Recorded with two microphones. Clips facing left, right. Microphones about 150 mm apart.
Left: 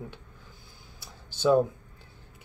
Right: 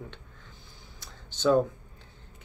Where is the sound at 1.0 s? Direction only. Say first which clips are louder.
Left 4 dB; 10° left (ahead or behind).